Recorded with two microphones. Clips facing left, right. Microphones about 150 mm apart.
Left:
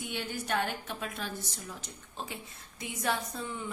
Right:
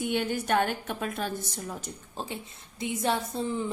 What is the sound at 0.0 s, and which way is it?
A woman's voice, 55° right (ahead or behind).